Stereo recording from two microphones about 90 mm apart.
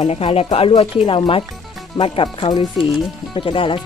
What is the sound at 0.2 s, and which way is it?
Speech, 90° left.